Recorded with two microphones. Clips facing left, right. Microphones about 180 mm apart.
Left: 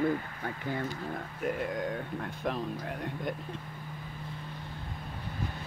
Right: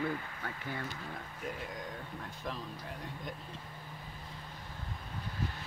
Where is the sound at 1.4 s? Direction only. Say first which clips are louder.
Left 10 dB; 60° left (ahead or behind).